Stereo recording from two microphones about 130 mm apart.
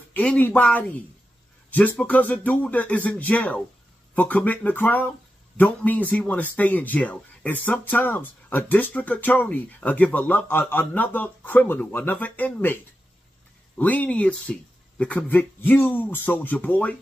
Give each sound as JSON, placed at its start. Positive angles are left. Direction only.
{"t": 0.1, "sound": "speech", "side_deg": 10}